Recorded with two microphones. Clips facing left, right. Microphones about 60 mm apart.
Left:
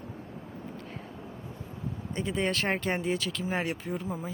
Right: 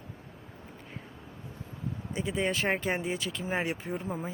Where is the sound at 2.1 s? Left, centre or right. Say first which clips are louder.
Left 1 dB; centre.